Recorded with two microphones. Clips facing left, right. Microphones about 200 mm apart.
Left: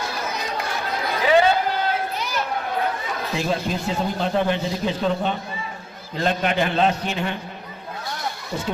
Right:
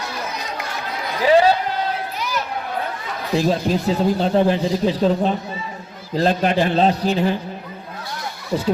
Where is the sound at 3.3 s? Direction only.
35° right (ahead or behind).